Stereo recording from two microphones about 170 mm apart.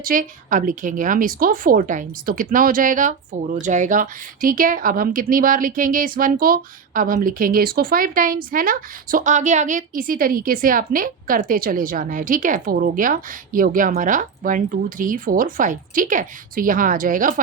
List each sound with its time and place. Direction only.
0.0 s a woman's voice: 55° right (ahead or behind)